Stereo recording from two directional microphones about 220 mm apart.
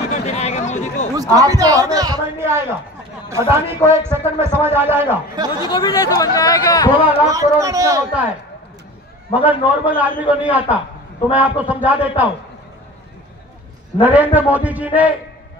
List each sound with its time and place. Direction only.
0.3 s chatter: 30° left (ahead or behind)
1.1 s a man's voice: 15° right (ahead or behind)
5.7 s speech: 20° left (ahead or behind)
7.2 s a man's voice: 15° right (ahead or behind)
9.3 s a man's voice: 5° right (ahead or behind)
14.0 s a man's voice: 10° right (ahead or behind)